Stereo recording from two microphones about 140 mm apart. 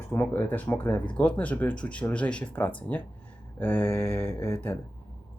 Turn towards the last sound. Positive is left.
turn(degrees=15)  # may be behind; listen again after turning